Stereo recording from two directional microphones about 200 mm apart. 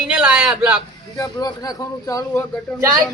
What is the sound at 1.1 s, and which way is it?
A man's voice, 20° left (ahead or behind).